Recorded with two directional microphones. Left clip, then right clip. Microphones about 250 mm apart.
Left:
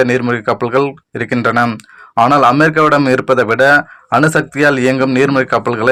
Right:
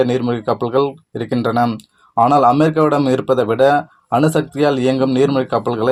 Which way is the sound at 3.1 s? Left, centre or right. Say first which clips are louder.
Left 4 dB; left.